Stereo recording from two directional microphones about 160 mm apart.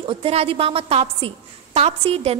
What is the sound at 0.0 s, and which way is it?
A woman's voice, 35° right (ahead or behind).